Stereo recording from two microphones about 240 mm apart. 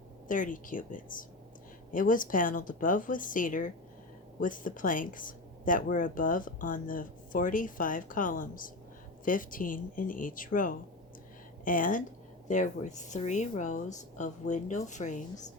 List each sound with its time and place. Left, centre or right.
0.3 s speech: left